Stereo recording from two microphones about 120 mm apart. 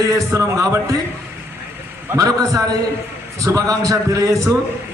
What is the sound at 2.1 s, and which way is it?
A man's voice, 30° right (ahead or behind).